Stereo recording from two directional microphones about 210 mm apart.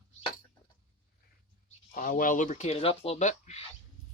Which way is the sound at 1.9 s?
40° left (ahead or behind).